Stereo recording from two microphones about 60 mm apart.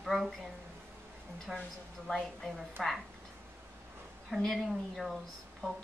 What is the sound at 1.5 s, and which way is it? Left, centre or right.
Speech, centre.